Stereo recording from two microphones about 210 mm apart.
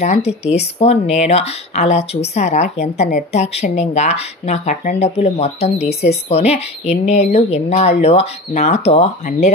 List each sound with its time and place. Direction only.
0.0 s a woman's voice: 30° left (ahead or behind)